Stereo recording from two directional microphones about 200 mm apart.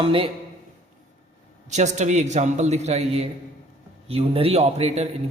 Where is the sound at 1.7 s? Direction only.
35° right (ahead or behind).